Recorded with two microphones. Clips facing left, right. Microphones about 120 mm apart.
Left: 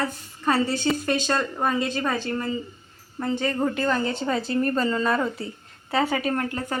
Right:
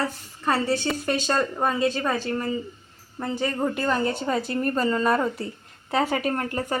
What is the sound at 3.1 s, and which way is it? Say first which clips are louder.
A woman's voice: left 2 dB; 10° right (ahead or behind).